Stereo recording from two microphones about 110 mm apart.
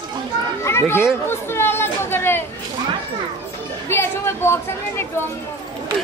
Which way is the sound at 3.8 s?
20° left (ahead or behind).